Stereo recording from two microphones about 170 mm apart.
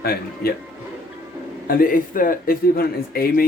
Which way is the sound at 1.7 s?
55° left (ahead or behind).